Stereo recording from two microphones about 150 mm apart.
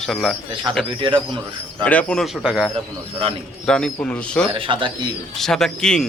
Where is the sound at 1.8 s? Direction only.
10° left (ahead or behind).